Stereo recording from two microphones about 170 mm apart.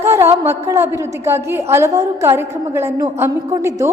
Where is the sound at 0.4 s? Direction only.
15° right (ahead or behind).